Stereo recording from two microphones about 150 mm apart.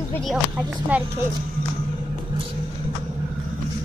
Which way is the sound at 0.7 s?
10° right (ahead or behind).